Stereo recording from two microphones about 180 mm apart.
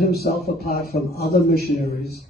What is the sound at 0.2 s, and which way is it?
A man's voice, 60° left (ahead or behind).